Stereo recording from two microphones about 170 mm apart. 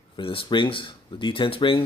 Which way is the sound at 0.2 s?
30° left (ahead or behind).